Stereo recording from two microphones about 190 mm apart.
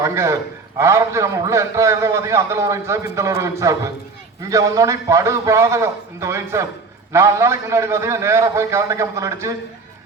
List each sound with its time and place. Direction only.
0.0 s a man's voice: 15° right (ahead or behind)